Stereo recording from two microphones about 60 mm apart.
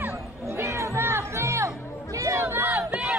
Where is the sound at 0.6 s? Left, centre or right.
Right.